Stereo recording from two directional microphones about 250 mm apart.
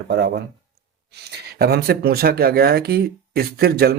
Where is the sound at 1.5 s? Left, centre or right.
Right.